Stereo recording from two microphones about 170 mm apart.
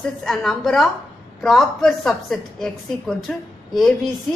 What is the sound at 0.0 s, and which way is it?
A woman's voice, centre (ahead or behind).